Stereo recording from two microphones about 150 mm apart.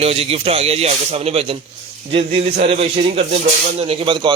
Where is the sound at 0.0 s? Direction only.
40° right (ahead or behind).